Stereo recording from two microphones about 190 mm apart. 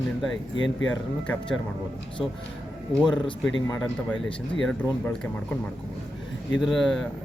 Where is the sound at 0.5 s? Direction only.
85° left.